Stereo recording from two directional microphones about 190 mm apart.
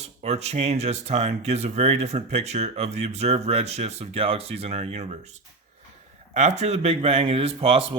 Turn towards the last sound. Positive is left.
turn(degrees=-30)  # may be behind; listen again after turning